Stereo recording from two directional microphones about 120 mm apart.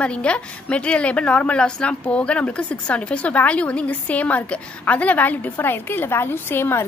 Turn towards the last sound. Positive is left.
turn(degrees=20)  # may be behind; listen again after turning